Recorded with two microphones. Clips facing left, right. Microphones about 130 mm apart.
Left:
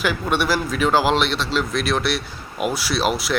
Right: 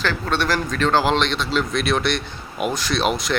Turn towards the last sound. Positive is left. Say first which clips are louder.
# even
turn(degrees=5)  # may be behind; listen again after turning